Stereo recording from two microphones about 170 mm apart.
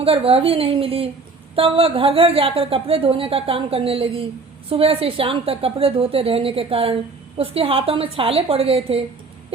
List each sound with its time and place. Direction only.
0.0 s speech: 35° right (ahead or behind)